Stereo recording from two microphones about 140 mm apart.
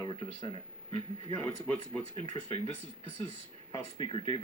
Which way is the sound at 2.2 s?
40° left (ahead or behind).